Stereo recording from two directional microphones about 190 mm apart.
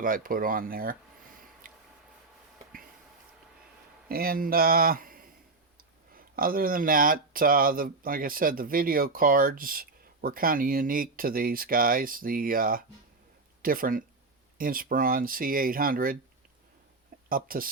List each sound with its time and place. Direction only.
0.0 s speech: 45° right (ahead or behind)
1.6 s a sound: 45° right (ahead or behind)
4.1 s speech: 50° right (ahead or behind)
17.2 s speech: 50° right (ahead or behind)